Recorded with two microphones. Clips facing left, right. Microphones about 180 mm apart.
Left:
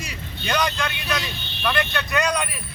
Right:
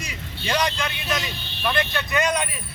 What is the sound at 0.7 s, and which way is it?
Speech, 20° right (ahead or behind).